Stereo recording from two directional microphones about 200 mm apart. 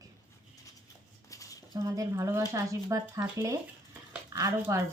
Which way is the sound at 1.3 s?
15° left (ahead or behind).